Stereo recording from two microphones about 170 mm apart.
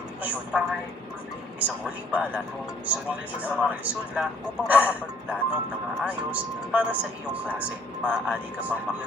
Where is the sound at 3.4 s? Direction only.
10° right (ahead or behind).